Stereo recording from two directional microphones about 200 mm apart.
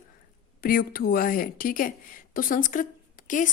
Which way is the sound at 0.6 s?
45° left (ahead or behind).